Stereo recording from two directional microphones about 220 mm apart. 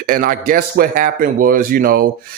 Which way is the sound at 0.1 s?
40° right (ahead or behind).